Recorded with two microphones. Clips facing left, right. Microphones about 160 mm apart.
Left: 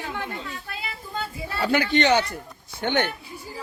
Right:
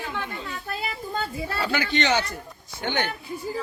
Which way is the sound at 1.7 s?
55° left (ahead or behind).